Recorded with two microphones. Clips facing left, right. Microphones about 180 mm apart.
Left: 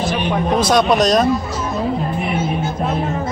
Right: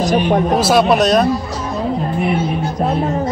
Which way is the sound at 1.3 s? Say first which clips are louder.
Even; 35° right (ahead or behind).